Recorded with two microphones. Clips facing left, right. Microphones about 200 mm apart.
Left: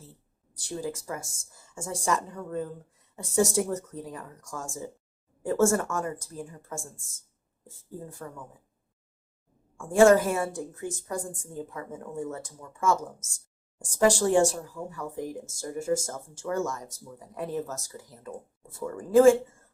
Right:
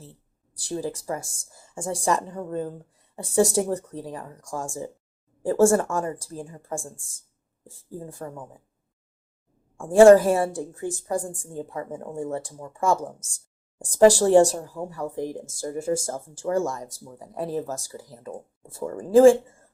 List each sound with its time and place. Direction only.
0.7 s speech: 35° right (ahead or behind)
8.2 s speech: 35° right (ahead or behind)
9.7 s speech: 30° right (ahead or behind)